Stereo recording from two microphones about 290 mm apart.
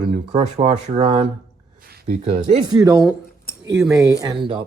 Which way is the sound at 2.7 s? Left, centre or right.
Centre.